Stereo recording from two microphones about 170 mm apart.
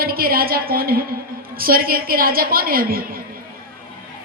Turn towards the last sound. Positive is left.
turn(degrees=-60)  # may be behind; listen again after turning